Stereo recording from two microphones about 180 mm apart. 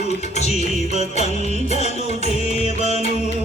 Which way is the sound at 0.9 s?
35° left (ahead or behind).